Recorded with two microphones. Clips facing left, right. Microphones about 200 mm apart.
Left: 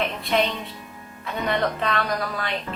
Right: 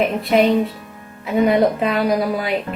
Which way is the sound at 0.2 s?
5° right (ahead or behind).